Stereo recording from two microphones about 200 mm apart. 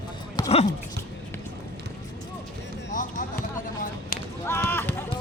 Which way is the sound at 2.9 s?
40° left (ahead or behind).